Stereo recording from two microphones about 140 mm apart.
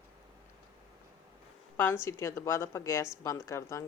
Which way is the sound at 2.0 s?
20° left (ahead or behind).